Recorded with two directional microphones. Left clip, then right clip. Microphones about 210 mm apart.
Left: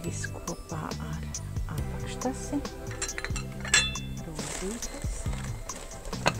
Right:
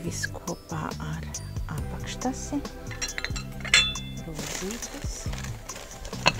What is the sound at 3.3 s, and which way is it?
Dishes, 5° right (ahead or behind).